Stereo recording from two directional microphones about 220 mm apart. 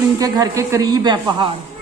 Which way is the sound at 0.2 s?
15° right (ahead or behind).